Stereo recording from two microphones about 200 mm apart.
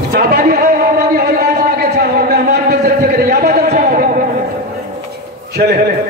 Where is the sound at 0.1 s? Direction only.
50° right (ahead or behind).